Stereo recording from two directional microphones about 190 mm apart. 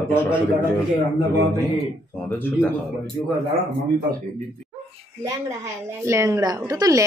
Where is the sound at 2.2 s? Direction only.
10° left (ahead or behind).